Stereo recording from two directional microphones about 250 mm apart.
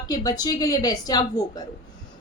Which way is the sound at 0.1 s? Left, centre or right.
Centre.